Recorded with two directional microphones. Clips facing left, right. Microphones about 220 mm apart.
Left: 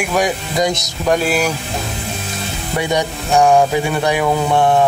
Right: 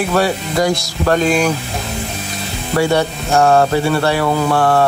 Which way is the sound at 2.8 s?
15° left (ahead or behind).